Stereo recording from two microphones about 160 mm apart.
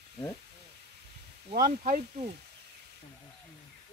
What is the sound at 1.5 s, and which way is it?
Speech, 60° right (ahead or behind).